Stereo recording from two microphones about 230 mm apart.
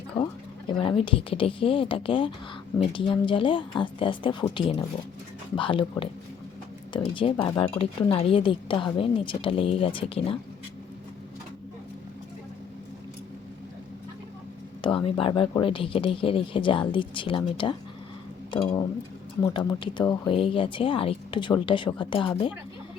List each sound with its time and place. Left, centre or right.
0.7 s speech: left
14.8 s speech: left